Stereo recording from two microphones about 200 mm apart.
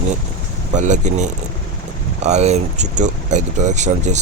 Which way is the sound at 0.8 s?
35° right (ahead or behind).